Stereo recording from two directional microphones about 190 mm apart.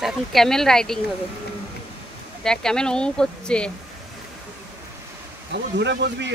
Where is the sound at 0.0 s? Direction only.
Centre (ahead or behind).